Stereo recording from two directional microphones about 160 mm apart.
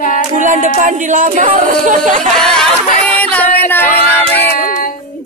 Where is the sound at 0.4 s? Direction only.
55° right (ahead or behind).